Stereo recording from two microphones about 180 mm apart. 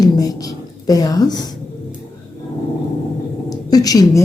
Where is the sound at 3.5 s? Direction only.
20° left (ahead or behind).